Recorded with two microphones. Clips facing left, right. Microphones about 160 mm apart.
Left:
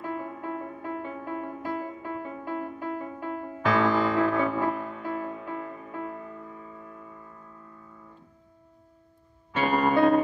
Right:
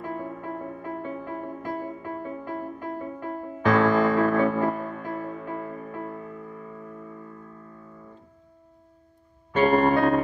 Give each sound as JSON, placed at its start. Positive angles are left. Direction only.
{"t": 0.0, "sound": "music", "side_deg": -45}
{"t": 9.6, "sound": "music", "side_deg": -45}